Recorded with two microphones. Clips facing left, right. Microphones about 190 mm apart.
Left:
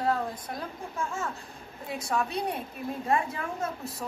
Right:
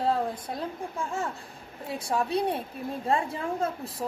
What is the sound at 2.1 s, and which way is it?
A woman's voice, 30° right (ahead or behind).